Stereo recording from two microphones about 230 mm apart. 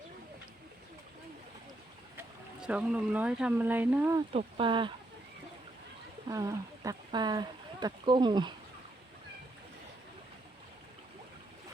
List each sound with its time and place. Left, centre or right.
2.1 s speech: centre
4.3 s speech: right
6.2 s speech: centre